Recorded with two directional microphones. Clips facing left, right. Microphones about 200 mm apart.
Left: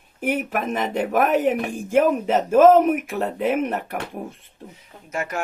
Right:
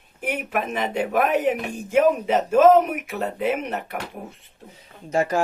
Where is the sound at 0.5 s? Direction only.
45° left (ahead or behind).